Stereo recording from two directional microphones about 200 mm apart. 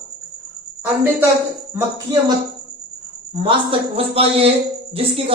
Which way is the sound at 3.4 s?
30° right (ahead or behind).